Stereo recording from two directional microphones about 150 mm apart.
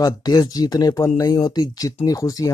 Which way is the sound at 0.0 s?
25° left (ahead or behind).